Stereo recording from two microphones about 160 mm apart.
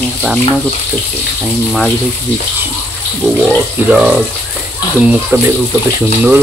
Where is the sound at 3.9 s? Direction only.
5° right (ahead or behind).